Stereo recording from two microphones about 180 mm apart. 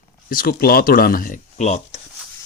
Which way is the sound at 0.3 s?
50° left (ahead or behind).